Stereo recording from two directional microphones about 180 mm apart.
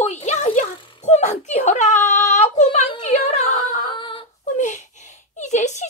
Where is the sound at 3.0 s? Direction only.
40° left (ahead or behind).